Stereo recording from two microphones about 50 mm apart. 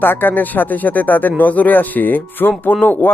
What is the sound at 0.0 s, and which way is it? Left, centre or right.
Speech, left.